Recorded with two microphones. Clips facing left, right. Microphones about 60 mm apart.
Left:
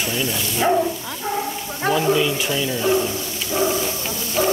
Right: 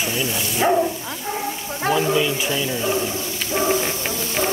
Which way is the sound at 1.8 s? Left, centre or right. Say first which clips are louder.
Left 1 dB; centre.